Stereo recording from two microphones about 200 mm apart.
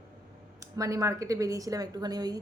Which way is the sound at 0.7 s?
15° right (ahead or behind).